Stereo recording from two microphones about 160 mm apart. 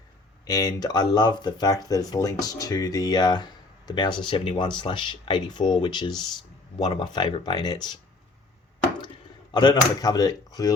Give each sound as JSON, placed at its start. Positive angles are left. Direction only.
{"t": 0.4, "sound": "speech", "side_deg": 25}
{"t": 9.5, "sound": "speech", "side_deg": 25}